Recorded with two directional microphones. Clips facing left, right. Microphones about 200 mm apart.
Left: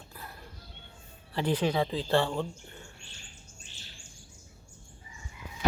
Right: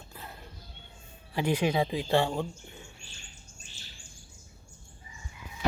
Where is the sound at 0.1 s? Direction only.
20° right (ahead or behind).